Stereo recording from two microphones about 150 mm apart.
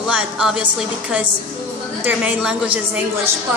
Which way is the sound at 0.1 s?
5° right (ahead or behind).